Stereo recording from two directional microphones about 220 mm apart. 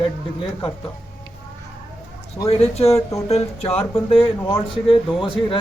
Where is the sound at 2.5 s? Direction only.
30° left (ahead or behind).